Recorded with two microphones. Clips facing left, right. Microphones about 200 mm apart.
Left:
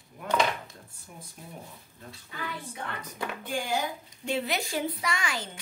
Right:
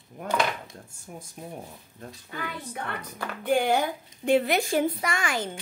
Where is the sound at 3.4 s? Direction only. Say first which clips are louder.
Right 9 dB; 60° right (ahead or behind).